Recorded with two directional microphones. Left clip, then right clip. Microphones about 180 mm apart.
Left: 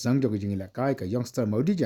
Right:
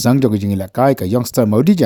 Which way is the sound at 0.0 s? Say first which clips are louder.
Right 12 dB; 50° right (ahead or behind).